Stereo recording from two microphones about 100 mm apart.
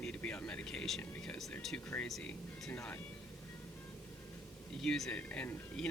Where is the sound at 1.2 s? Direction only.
5° left (ahead or behind).